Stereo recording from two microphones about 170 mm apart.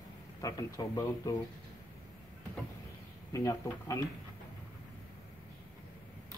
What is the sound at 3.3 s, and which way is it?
Speech, 20° left (ahead or behind).